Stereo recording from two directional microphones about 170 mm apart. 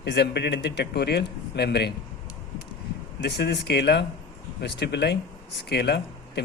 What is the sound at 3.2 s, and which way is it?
Speech, 75° left (ahead or behind).